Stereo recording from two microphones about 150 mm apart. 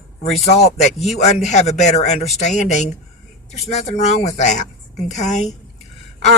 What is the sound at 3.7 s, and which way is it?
A woman's voice, 45° left (ahead or behind).